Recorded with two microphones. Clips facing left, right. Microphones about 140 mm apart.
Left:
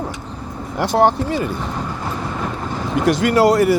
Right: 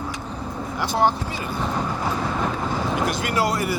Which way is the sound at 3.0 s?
90° left.